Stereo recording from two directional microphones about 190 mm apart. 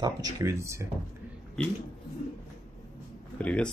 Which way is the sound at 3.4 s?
5° left (ahead or behind).